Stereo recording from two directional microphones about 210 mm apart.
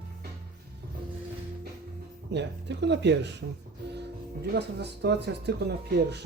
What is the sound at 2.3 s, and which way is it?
Speech, 55° right (ahead or behind).